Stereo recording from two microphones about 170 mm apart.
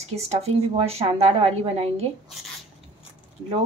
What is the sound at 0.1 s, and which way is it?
A woman's voice, 40° right (ahead or behind).